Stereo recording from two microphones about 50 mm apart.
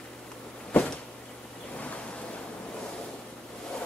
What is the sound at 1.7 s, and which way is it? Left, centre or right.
Waves, left.